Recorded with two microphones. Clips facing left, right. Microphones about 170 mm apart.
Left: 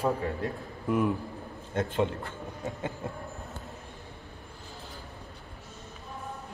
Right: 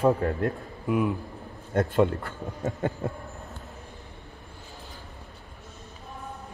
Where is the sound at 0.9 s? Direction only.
5° right (ahead or behind).